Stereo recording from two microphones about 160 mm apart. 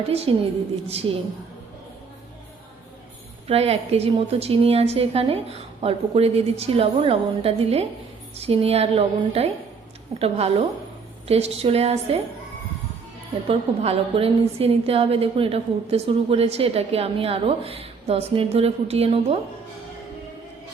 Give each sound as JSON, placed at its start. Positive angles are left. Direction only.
{"t": 0.1, "sound": "a woman's voice", "side_deg": -40}
{"t": 3.4, "sound": "a woman's voice", "side_deg": -40}
{"t": 13.5, "sound": "a woman's voice", "side_deg": -35}